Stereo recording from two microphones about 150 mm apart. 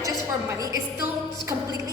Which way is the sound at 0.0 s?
20° right (ahead or behind).